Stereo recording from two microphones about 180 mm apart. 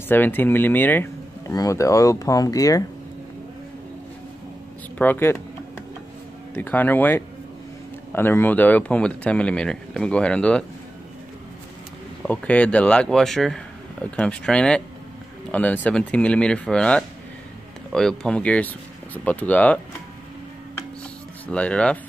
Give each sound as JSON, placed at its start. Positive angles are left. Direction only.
{"t": 0.1, "sound": "speech", "side_deg": 10}
{"t": 4.9, "sound": "speech", "side_deg": 10}
{"t": 6.5, "sound": "speech", "side_deg": 10}
{"t": 12.3, "sound": "speech", "side_deg": 5}
{"t": 21.5, "sound": "speech", "side_deg": 5}